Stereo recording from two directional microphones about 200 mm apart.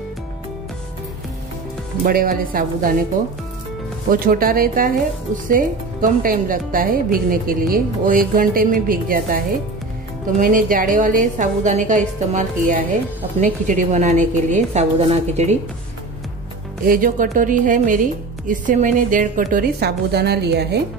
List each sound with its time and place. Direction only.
2.0 s speech: 45° right (ahead or behind)
4.1 s speech: 45° right (ahead or behind)
10.4 s a woman's voice: 45° right (ahead or behind)
16.8 s a woman's voice: 45° right (ahead or behind)
19.5 s a woman's voice: 55° right (ahead or behind)